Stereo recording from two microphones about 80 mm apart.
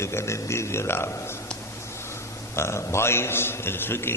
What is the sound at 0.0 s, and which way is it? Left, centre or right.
A man's voice, left.